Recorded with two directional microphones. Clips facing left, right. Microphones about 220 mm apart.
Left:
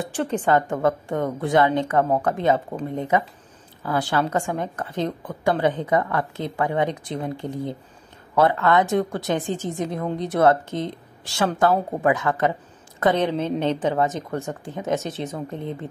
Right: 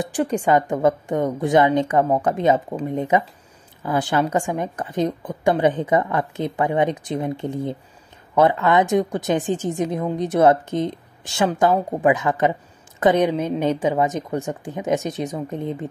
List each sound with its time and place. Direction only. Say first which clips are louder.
0.0 s a woman's voice: right 3 dB; 15° right (ahead or behind)
9.5 s a woman's voice: right 4 dB; 50° right (ahead or behind)
9.8 s a woman's voice: right 3 dB; 20° right (ahead or behind)